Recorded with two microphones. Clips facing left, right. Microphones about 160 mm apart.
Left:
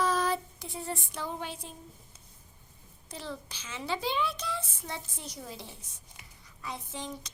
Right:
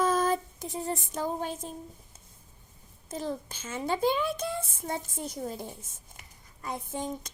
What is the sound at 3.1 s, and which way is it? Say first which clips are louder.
A child's voice: right 6 dB; 45° right (ahead or behind).